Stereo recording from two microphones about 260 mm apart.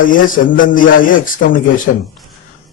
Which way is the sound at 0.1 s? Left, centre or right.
Left.